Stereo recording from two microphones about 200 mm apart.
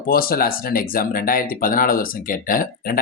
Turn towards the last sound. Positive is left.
turn(degrees=45)  # may be behind; listen again after turning